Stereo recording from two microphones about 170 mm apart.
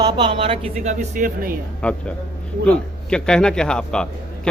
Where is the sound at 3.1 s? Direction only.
5° left (ahead or behind).